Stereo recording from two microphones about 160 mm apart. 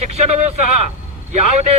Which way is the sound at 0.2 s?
45° right (ahead or behind).